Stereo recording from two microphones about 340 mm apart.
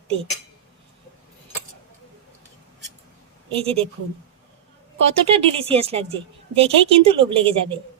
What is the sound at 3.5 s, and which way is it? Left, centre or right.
Speech, centre.